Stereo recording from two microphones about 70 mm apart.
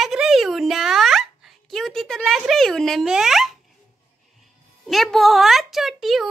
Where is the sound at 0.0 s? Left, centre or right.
Centre.